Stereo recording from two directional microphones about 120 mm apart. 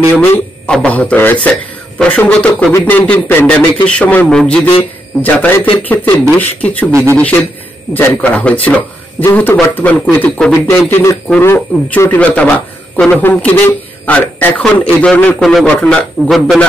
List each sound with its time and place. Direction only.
0.1 s a man's voice: 15° left (ahead or behind)
6.9 s speech: 20° right (ahead or behind)
7.9 s speech: 15° left (ahead or behind)
10.9 s a sound: 25° left (ahead or behind)
11.4 s a man's voice: 20° left (ahead or behind); by 16.6 s centre (ahead or behind)